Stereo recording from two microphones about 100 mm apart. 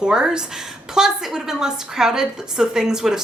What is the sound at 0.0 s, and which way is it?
A woman's voice, 5° right (ahead or behind).